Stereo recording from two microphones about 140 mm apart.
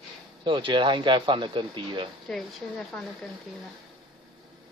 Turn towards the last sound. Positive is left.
turn(degrees=0)  # may be behind; listen again after turning